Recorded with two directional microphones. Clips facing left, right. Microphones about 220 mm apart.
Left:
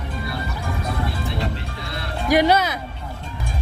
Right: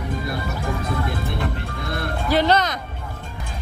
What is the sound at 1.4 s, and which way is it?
Music, 50° right (ahead or behind).